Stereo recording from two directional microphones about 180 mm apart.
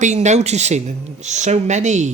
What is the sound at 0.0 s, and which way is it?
Speech, 40° right (ahead or behind).